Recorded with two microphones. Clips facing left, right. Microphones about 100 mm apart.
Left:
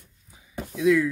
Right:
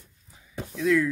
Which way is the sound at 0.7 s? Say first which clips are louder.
Left 3 dB; 5° left (ahead or behind).